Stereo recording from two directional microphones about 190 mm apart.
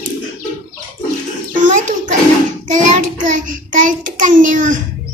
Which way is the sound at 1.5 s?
45° right (ahead or behind).